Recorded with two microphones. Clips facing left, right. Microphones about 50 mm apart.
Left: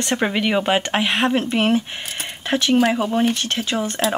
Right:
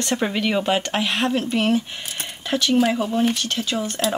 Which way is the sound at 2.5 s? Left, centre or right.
Left.